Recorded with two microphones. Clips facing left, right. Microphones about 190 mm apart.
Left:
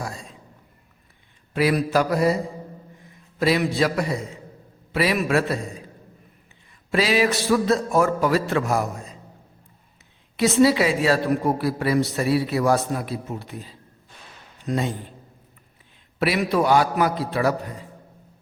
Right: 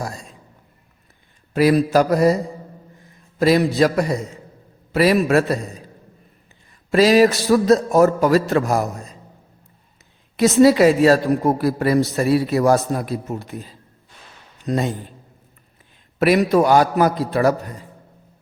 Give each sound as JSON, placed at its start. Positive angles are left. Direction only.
{"t": 1.5, "sound": "a man's voice", "side_deg": -40}
{"t": 6.9, "sound": "a man's voice", "side_deg": -40}
{"t": 10.3, "sound": "a man's voice", "side_deg": -45}
{"t": 16.1, "sound": "a man's voice", "side_deg": -45}